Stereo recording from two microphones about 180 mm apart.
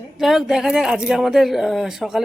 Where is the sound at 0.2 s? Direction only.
Centre (ahead or behind).